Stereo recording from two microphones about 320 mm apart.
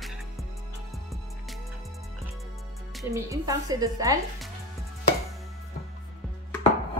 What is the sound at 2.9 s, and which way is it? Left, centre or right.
Speech, centre.